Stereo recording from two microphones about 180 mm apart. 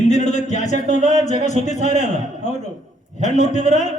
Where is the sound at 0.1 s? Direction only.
40° left (ahead or behind).